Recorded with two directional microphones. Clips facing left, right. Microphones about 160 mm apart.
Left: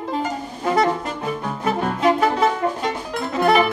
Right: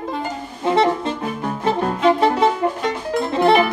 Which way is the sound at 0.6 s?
25° right (ahead or behind).